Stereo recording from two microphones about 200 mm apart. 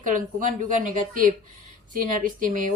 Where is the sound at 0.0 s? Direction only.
40° right (ahead or behind).